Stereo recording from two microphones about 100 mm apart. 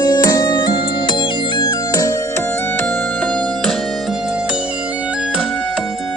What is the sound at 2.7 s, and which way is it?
Music, 10° left (ahead or behind).